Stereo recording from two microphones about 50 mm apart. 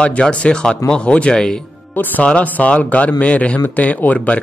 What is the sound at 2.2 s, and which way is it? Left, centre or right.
A man's voice, left.